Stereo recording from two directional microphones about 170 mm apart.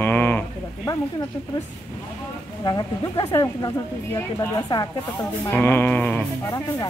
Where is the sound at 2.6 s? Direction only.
25° left (ahead or behind); by 6.2 s 10° left (ahead or behind).